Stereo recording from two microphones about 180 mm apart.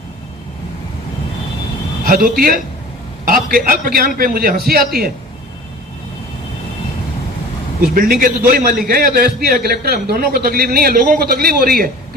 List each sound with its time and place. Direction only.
2.0 s a man's voice: 50° right (ahead or behind)
7.8 s a man's voice: 50° right (ahead or behind)